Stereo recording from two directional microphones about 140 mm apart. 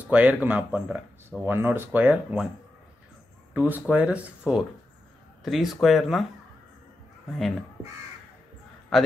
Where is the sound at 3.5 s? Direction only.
10° right (ahead or behind).